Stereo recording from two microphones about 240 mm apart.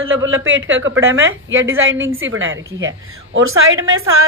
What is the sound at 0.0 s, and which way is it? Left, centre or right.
A woman's voice, right.